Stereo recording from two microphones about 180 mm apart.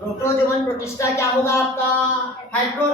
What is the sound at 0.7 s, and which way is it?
Speech, 15° left (ahead or behind).